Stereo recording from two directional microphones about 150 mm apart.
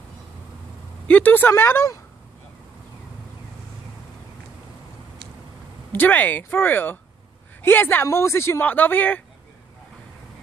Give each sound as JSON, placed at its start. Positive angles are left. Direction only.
{"t": 1.0, "sound": "speech", "side_deg": 10}
{"t": 5.9, "sound": "speech", "side_deg": 10}